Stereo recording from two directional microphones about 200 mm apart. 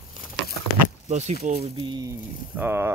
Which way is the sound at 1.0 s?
35° right (ahead or behind).